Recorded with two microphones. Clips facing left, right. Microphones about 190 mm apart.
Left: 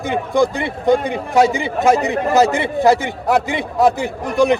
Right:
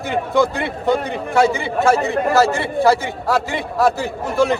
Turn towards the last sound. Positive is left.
turn(degrees=15)  # may be behind; listen again after turning